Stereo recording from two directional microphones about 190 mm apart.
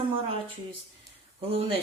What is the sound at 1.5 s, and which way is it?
Speech, 30° right (ahead or behind).